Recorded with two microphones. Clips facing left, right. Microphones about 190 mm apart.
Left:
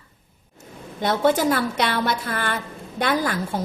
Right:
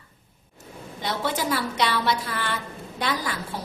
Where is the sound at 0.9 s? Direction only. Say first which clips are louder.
Left 8 dB; 50° left (ahead or behind).